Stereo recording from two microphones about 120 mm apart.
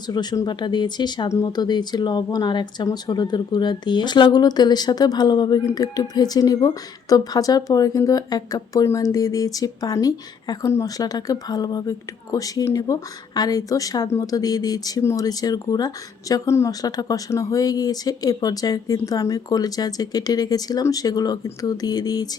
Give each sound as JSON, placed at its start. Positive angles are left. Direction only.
{"t": 0.1, "sound": "speech", "side_deg": 35}